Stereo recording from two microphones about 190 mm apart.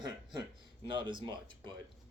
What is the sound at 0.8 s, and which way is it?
Speech, 25° right (ahead or behind).